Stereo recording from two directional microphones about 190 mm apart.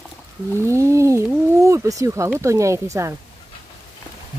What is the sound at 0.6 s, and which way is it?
Speech, 15° right (ahead or behind).